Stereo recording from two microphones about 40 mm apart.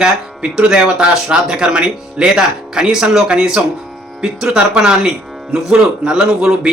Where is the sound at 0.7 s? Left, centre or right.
Right.